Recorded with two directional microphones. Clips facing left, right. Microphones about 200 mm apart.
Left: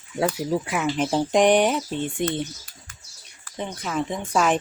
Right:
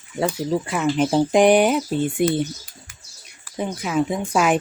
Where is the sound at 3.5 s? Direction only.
10° right (ahead or behind).